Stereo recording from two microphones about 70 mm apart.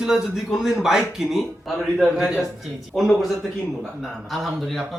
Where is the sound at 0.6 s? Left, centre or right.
Centre.